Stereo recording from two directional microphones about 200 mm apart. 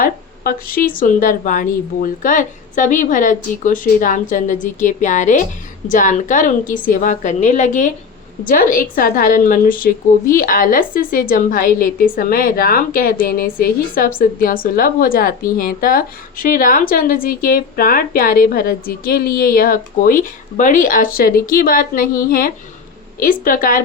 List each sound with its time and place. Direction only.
0.0 s a woman's voice: 45° left (ahead or behind)